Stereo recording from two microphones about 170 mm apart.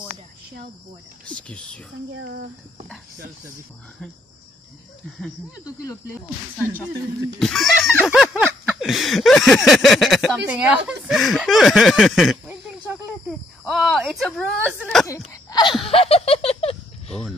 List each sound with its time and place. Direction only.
1.2 s speech: 5° left (ahead or behind)
7.3 s snicker: centre (ahead or behind)
12.4 s snake: 10° right (ahead or behind)
13.3 s snicker: centre (ahead or behind)
15.0 s speech: 20° left (ahead or behind)
15.8 s laughter: 35° left (ahead or behind)